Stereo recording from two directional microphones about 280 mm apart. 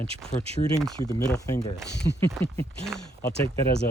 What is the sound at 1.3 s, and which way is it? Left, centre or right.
Speech, centre.